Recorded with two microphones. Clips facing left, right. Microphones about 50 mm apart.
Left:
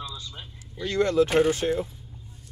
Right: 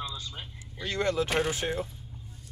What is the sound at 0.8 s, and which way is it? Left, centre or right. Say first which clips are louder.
Speech: left 6 dB; centre.